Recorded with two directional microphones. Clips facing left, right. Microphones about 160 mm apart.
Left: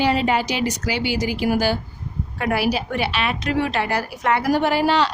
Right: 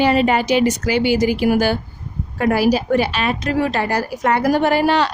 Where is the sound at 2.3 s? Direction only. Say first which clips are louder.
Right 6 dB; 40° right (ahead or behind).